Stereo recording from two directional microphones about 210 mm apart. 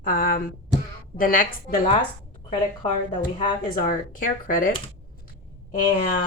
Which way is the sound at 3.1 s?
25° left (ahead or behind).